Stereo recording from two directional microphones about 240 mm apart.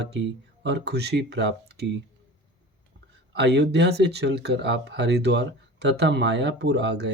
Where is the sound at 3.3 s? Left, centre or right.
Right.